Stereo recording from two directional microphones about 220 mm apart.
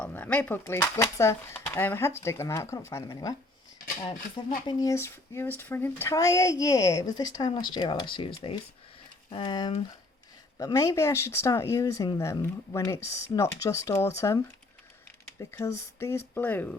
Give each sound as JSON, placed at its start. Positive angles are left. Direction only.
{"t": 0.0, "sound": "speech", "side_deg": 10}
{"t": 9.3, "sound": "speech", "side_deg": 20}